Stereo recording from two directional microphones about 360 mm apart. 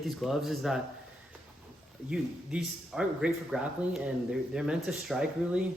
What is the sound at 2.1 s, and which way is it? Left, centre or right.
Speech, centre.